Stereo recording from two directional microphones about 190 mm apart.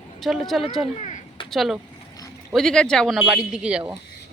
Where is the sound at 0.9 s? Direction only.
40° left (ahead or behind).